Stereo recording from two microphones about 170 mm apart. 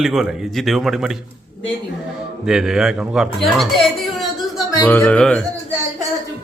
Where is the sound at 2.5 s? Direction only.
5° right (ahead or behind).